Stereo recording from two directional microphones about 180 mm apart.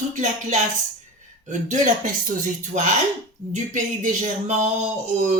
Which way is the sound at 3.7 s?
45° right (ahead or behind).